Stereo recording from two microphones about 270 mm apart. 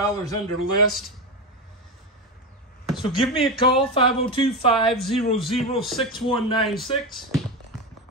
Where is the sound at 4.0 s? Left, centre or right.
Centre.